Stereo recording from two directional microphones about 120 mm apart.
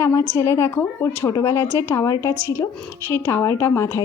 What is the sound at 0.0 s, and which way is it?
A woman's voice, 25° left (ahead or behind).